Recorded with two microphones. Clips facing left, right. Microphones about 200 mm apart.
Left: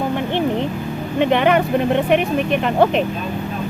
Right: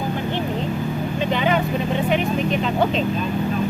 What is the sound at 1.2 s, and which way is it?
Speech, 65° left (ahead or behind).